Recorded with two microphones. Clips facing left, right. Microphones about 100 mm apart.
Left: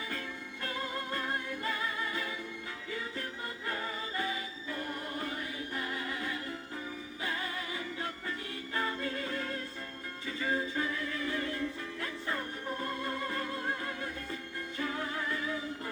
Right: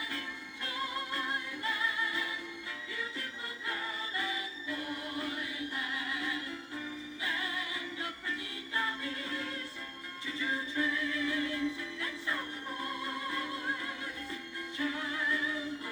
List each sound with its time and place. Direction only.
1.1 s music: 40° left (ahead or behind)
4.2 s music: 40° left (ahead or behind)
8.7 s music: 40° left (ahead or behind)